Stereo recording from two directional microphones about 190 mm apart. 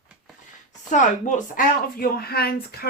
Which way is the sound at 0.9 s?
40° left (ahead or behind).